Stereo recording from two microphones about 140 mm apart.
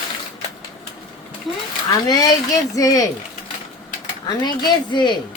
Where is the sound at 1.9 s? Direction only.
25° left (ahead or behind).